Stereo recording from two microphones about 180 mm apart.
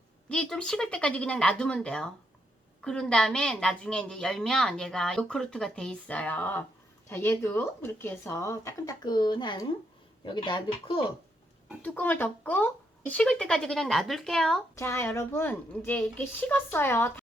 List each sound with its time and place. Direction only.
0.3 s a woman's voice: 5° left (ahead or behind); by 11.0 s 30° left (ahead or behind)
11.8 s a woman's voice: 10° left (ahead or behind)
14.8 s speech: 15° left (ahead or behind)